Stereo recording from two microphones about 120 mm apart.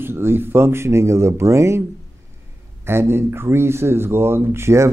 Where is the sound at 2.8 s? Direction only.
20° right (ahead or behind).